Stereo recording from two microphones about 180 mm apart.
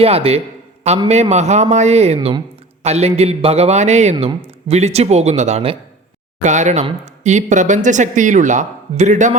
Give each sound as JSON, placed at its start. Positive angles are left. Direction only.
{"t": 0.0, "sound": "a man's voice", "side_deg": -35}
{"t": 2.1, "sound": "speech", "side_deg": -25}
{"t": 2.8, "sound": "a man's voice", "side_deg": -35}